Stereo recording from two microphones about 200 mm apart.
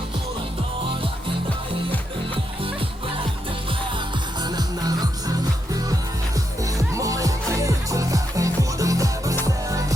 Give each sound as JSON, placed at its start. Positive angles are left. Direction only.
{"t": 4.4, "sound": "music", "side_deg": -20}